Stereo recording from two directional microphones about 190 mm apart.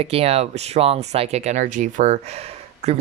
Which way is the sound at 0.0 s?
30° right (ahead or behind).